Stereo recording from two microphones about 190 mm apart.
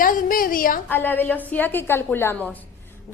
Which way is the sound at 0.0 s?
45° left (ahead or behind).